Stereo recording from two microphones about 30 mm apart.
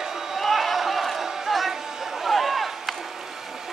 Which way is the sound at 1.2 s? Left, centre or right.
Centre.